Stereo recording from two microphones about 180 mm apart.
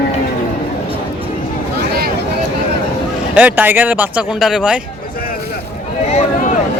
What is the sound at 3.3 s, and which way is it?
Speech, 10° right (ahead or behind).